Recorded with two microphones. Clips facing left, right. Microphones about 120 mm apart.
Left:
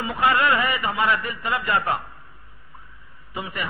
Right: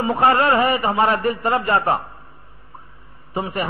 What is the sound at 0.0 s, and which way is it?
Speech, 30° right (ahead or behind).